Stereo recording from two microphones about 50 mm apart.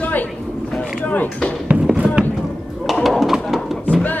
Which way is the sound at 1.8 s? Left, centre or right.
Right.